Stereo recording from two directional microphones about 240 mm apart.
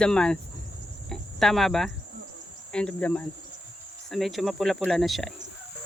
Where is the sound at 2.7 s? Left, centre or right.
Centre.